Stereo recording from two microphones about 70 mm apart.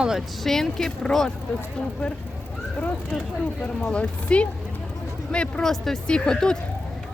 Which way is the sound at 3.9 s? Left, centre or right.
Centre.